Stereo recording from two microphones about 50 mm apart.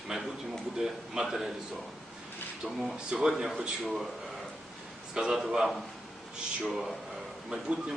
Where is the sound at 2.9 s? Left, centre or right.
Centre.